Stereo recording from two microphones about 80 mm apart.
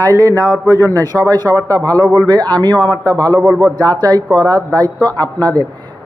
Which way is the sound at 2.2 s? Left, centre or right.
Right.